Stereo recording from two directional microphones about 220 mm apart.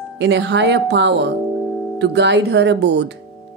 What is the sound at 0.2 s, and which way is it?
Speech, 50° right (ahead or behind).